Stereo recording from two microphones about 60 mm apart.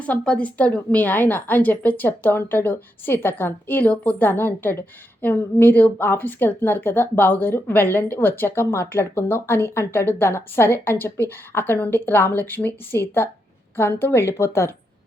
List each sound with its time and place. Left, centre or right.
0.0 s a woman's voice: left
4.3 s a woman's voice: left